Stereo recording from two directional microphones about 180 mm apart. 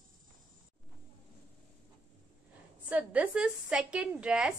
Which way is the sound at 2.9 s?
10° right (ahead or behind).